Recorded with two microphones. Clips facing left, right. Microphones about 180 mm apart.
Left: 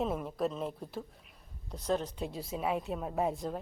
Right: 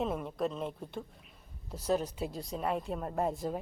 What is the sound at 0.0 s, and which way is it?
Speech, centre (ahead or behind).